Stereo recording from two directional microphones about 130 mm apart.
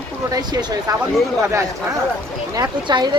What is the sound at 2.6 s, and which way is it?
Speech, 35° right (ahead or behind).